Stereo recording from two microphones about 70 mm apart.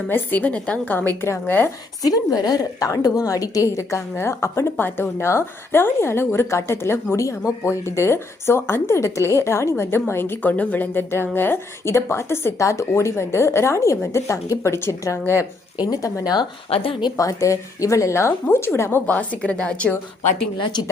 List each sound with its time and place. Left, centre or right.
0.1 s a woman's voice: left
0.9 s a woman's voice: left
2.0 s a woman's voice: left
4.1 s a woman's voice: left
12.5 s a woman's voice: left
15.8 s a woman's voice: left
17.2 s a woman's voice: left
19.0 s a woman's voice: left